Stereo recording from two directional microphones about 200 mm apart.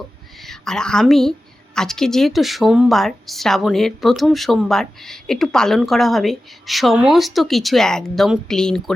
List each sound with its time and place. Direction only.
0.4 s a woman's voice: centre (ahead or behind)